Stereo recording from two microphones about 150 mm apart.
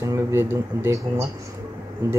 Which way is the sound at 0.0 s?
20° right (ahead or behind).